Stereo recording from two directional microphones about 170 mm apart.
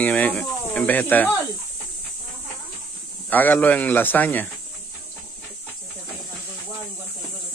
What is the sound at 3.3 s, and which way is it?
Speech, 10° left (ahead or behind).